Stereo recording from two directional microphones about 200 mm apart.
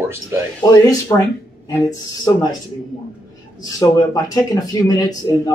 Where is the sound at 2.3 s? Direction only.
15° left (ahead or behind).